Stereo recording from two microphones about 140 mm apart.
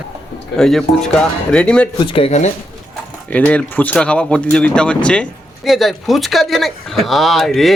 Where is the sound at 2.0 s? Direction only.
40° left (ahead or behind).